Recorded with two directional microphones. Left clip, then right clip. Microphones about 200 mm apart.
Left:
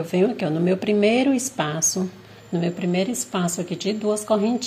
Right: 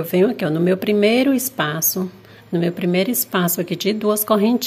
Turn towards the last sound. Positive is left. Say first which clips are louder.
# right 4 dB
turn(degrees=-35)  # may be behind; listen again after turning